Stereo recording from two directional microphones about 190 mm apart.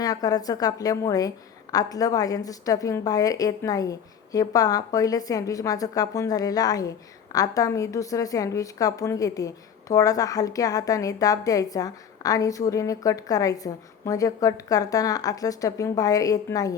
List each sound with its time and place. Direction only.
0.0 s a woman's voice: 20° left (ahead or behind)